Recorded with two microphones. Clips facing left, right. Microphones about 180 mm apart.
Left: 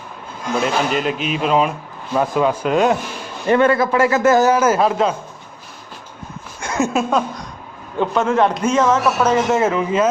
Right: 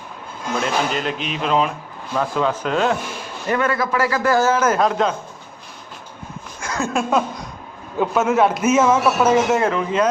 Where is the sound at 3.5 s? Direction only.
30° left (ahead or behind); by 5.1 s 5° left (ahead or behind).